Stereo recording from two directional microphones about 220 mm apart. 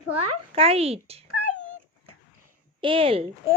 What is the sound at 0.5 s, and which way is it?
Speech, 25° right (ahead or behind).